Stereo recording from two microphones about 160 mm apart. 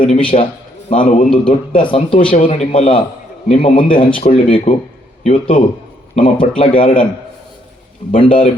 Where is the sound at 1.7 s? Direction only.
30° left (ahead or behind).